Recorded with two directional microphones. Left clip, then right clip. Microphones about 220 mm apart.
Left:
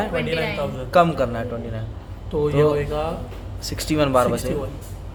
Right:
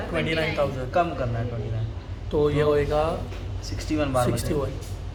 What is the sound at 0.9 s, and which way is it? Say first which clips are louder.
Speech: left 7 dB; 60° left (ahead or behind).